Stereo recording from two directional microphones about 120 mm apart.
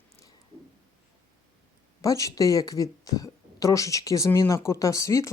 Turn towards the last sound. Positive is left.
turn(degrees=25)  # may be behind; listen again after turning